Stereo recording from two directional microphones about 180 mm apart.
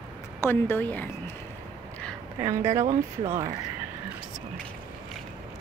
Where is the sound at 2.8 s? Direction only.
40° right (ahead or behind).